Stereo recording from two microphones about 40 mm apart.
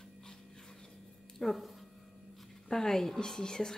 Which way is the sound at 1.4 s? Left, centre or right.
Centre.